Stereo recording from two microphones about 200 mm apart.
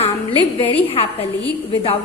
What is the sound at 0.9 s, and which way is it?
Speech, 30° left (ahead or behind).